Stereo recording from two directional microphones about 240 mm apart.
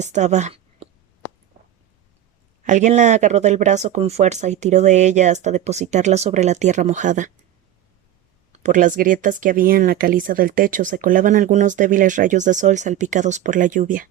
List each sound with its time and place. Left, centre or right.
0.0 s a woman's voice: right
2.6 s speech: right
8.5 s speech: right